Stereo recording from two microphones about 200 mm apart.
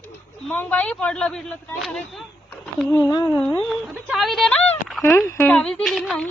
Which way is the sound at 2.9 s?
20° left (ahead or behind).